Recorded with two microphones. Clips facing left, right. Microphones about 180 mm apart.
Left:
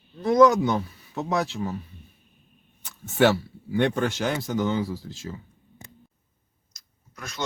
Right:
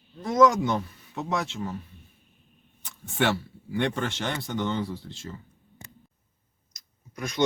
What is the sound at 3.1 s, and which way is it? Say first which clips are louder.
Speech: left 6 dB; centre (ahead or behind).